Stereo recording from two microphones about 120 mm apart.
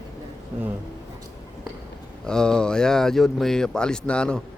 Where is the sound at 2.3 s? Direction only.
5° left (ahead or behind).